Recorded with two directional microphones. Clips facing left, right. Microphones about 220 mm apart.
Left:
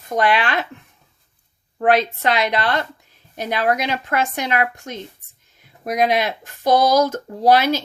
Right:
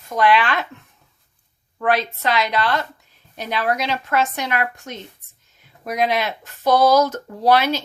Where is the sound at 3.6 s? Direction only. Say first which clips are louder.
Left 2 dB; 15° left (ahead or behind).